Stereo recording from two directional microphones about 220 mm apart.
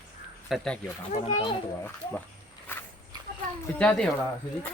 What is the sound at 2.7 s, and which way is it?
Walk, 10° left (ahead or behind).